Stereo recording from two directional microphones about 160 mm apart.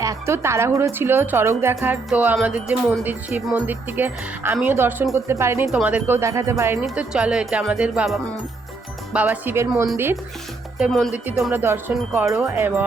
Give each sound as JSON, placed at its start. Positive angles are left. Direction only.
{"t": 0.0, "sound": "speech", "side_deg": -20}
{"t": 6.8, "sound": "speech", "side_deg": -5}
{"t": 10.8, "sound": "speech", "side_deg": 0}